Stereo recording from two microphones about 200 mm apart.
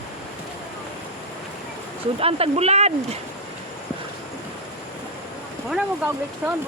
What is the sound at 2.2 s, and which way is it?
Speech, 30° right (ahead or behind).